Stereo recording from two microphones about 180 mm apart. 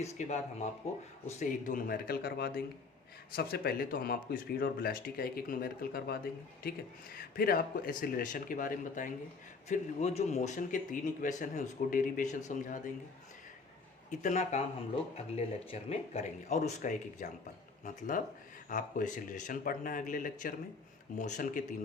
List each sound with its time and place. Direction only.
0.0 s speech: 40° left (ahead or behind)
14.2 s speech: 40° left (ahead or behind)